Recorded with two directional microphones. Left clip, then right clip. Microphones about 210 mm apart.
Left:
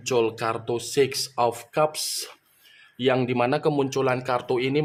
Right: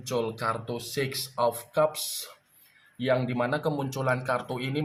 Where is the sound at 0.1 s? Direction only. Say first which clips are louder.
Left 5 dB; 50° left (ahead or behind).